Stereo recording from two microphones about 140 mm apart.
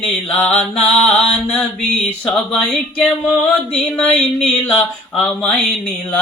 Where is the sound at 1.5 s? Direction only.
5° left (ahead or behind).